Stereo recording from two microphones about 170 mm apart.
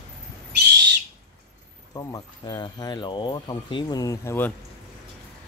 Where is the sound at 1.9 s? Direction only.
25° left (ahead or behind).